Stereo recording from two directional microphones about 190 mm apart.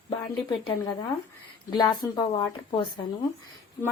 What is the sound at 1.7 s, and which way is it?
Speech, 20° left (ahead or behind).